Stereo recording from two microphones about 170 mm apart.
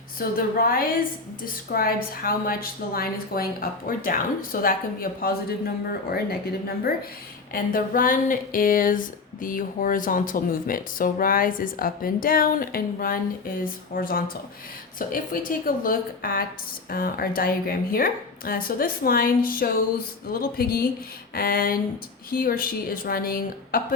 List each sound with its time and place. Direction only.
0.2 s speech: 60° left (ahead or behind)
7.5 s speech: 55° left (ahead or behind)